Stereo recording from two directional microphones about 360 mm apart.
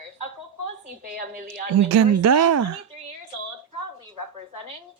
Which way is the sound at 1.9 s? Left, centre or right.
Right.